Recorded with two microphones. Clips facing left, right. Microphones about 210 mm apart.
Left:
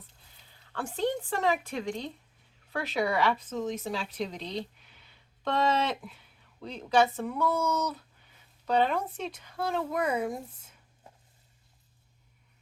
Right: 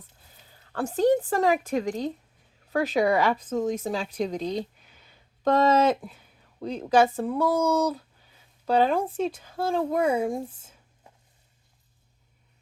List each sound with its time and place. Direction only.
0.5 s speech: 40° right (ahead or behind)